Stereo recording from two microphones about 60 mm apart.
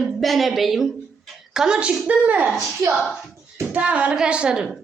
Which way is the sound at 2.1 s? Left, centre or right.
Right.